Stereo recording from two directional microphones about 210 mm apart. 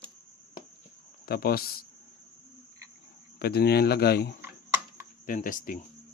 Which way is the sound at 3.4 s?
50° left (ahead or behind).